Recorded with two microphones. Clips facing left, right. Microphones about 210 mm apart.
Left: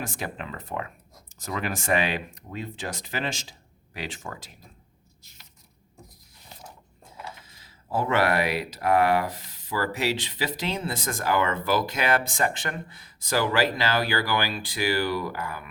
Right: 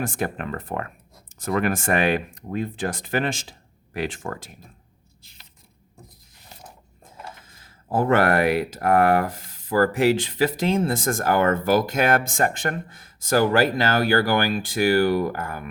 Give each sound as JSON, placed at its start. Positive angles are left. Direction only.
{"t": 0.0, "sound": "speech", "side_deg": -55}
{"t": 7.0, "sound": "speech", "side_deg": -50}